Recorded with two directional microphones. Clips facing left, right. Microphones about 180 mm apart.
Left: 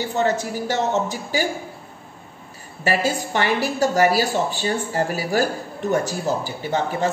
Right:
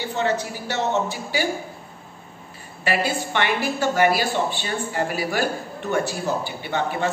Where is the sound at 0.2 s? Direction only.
45° left (ahead or behind).